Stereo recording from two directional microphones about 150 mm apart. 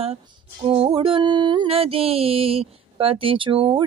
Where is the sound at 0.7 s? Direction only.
35° right (ahead or behind).